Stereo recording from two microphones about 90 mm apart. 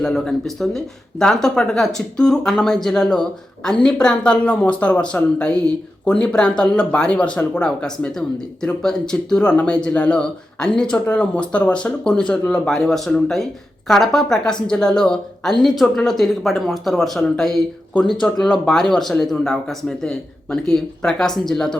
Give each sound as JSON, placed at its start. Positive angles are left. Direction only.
{"t": 0.0, "sound": "a man's voice", "side_deg": 5}